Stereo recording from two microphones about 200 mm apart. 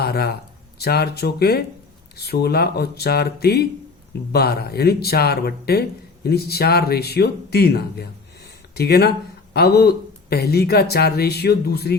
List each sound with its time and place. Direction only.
0.0 s speech: 50° left (ahead or behind)